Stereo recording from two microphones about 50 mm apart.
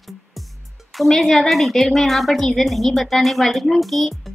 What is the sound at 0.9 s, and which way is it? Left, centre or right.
Speech, centre.